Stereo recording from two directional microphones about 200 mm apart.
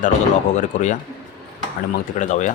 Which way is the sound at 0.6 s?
40° left (ahead or behind).